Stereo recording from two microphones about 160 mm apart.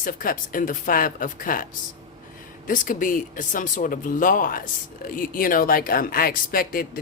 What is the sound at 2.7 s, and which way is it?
Speech, 55° left (ahead or behind).